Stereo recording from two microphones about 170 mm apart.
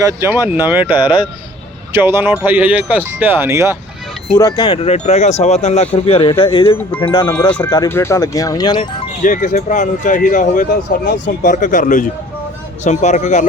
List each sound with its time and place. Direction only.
0.0 s speech: 20° right (ahead or behind)
1.0 s speech: 25° left (ahead or behind)
1.9 s speech: 15° right (ahead or behind)
4.4 s speech: 20° left (ahead or behind)
7.3 s speech: 10° left (ahead or behind); by 8.9 s 25° left (ahead or behind)
9.2 s speech: 50° left (ahead or behind)